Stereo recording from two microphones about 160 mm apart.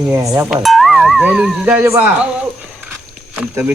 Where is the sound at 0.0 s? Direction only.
20° right (ahead or behind).